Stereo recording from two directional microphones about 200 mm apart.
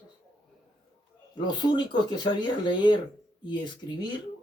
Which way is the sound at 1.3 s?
20° left (ahead or behind).